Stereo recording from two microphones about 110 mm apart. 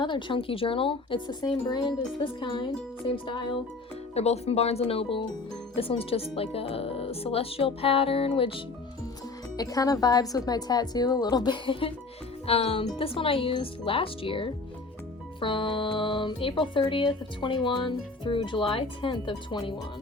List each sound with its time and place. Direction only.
0.0 s speech: 45° left (ahead or behind)
4.1 s speech: 70° left (ahead or behind); by 8.6 s 55° left (ahead or behind)
9.6 s a woman's voice: 35° left (ahead or behind)